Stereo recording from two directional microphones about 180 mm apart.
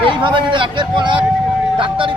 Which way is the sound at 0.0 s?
25° right (ahead or behind).